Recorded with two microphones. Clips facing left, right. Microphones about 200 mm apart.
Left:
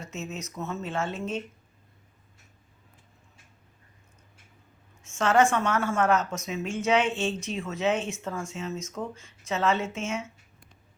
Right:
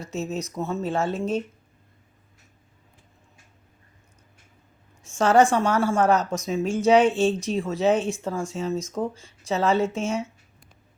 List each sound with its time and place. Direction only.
0.0 s speech: 35° right (ahead or behind)
5.0 s speech: 35° right (ahead or behind)